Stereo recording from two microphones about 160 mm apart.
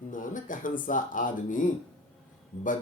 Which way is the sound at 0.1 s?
55° left (ahead or behind).